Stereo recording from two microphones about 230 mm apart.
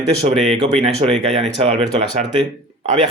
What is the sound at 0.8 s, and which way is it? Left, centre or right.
Speech, right.